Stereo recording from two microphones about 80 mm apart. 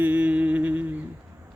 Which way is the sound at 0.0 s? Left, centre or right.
Centre.